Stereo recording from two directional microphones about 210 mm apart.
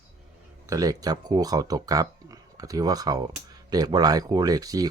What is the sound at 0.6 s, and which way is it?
Speech, 15° right (ahead or behind).